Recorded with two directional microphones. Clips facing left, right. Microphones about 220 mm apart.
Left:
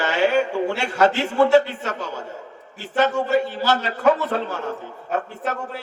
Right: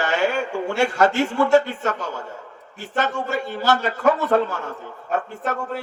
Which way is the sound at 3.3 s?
45° right (ahead or behind).